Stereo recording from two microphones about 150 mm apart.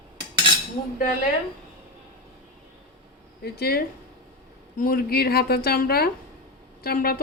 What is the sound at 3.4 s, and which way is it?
Speech, 90° left.